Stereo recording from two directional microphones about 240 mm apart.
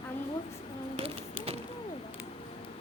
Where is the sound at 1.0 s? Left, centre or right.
Right.